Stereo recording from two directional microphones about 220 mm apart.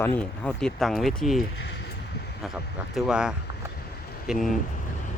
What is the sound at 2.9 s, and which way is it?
Speech, centre (ahead or behind).